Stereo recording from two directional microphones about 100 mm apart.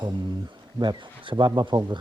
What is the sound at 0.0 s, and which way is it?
Speech, 50° right (ahead or behind).